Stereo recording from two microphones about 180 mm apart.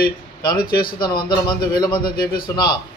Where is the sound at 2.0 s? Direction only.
55° left (ahead or behind).